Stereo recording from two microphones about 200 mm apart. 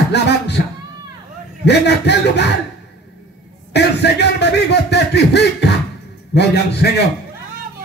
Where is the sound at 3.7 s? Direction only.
60° left (ahead or behind).